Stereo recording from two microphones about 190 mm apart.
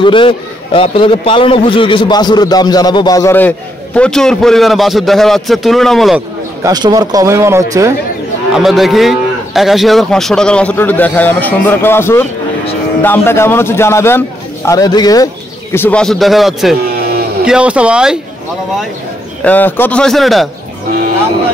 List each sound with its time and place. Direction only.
0.0 s a man's voice: 25° left (ahead or behind); by 6.2 s centre (ahead or behind)
6.6 s a man's voice: 20° right (ahead or behind)
8.5 s a man's voice: centre (ahead or behind); by 15.2 s 20° left (ahead or behind)
15.7 s speech: 10° left (ahead or behind)
19.4 s speech: 10° left (ahead or behind)